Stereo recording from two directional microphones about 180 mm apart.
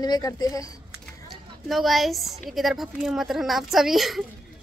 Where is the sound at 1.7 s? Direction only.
Centre (ahead or behind).